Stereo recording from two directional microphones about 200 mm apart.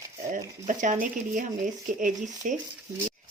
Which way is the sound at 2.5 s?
40° right (ahead or behind).